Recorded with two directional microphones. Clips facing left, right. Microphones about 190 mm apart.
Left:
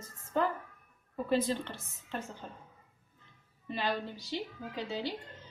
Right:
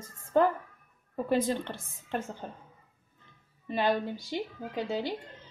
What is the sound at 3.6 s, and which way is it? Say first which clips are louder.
Speech: right 6 dB; 50° right (ahead or behind).